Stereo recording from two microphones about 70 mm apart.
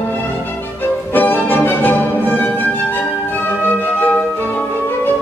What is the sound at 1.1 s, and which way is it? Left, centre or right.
Music, left.